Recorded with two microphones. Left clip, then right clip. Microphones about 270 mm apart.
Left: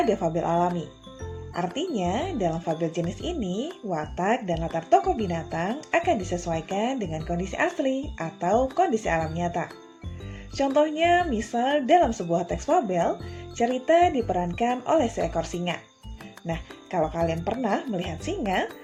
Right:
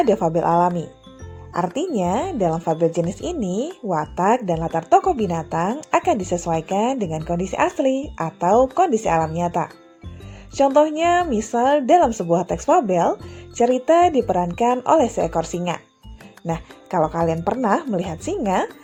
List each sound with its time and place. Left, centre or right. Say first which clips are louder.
0.0 s speech: right 7 dB; right
10.8 s speech: right 2 dB; right